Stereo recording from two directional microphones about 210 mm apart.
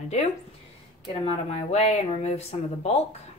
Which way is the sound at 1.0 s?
25° left (ahead or behind).